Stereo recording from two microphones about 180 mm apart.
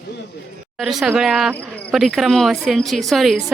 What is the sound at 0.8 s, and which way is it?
Speech, centre (ahead or behind).